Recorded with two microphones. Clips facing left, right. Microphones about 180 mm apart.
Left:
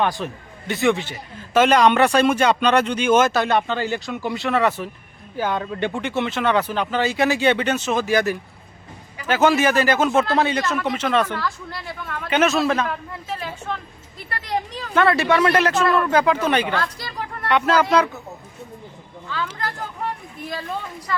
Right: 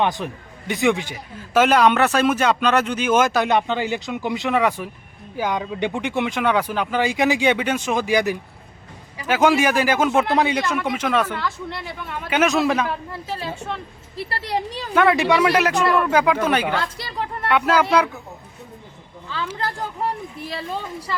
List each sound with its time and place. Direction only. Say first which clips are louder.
0.0 s a man's voice: even; 20° right (ahead or behind)
11.7 s a man's voice: right 1 dB; 20° right (ahead or behind)
13.3 s speech: even; 30° right (ahead or behind)
14.9 s a man's voice: right 1 dB; 15° right (ahead or behind)
16.7 s a woman's voice: even; 25° right (ahead or behind)
17.5 s a man's voice: even; 10° right (ahead or behind)
20.5 s speech: left 1 dB; 25° right (ahead or behind)